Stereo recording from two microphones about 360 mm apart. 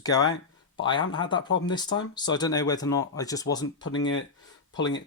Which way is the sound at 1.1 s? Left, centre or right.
Centre.